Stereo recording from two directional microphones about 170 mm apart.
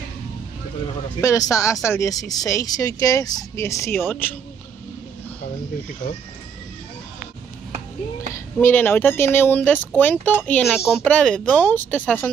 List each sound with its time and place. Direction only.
1.2 s speech: 20° left (ahead or behind)
8.3 s speech: 10° left (ahead or behind)